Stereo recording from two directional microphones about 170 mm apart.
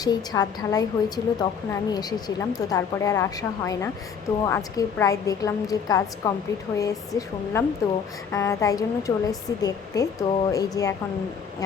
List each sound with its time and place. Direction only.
0.0 s a woman's voice: 20° left (ahead or behind)